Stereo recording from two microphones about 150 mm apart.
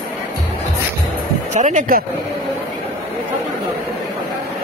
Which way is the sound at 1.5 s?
55° right (ahead or behind).